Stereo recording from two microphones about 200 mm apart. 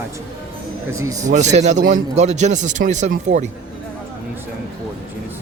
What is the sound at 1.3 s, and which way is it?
A man's voice, 35° right (ahead or behind).